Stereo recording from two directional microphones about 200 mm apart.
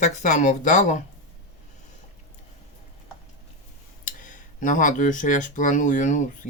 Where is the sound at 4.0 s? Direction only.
40° left (ahead or behind).